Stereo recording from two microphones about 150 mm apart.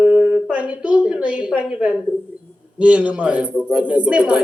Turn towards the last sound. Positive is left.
turn(degrees=-10)  # may be behind; listen again after turning